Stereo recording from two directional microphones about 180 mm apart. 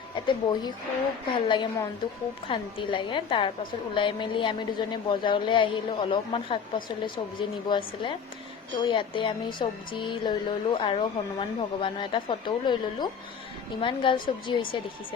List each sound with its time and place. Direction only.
0.3 s speech: 25° left (ahead or behind)